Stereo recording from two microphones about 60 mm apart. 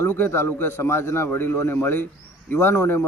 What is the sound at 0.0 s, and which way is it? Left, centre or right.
A man's voice, left.